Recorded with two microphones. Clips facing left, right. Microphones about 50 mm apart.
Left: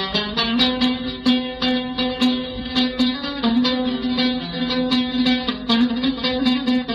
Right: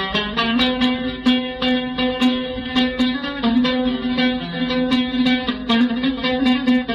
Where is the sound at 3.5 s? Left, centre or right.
Right.